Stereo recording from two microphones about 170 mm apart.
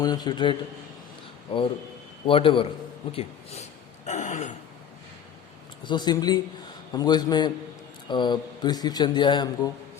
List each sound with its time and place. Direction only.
0.0 s a man's voice: 25° left (ahead or behind); by 4.5 s 45° left (ahead or behind)
5.8 s a man's voice: 25° left (ahead or behind)